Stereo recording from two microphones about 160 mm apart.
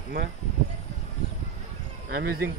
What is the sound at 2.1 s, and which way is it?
Speech, 85° right.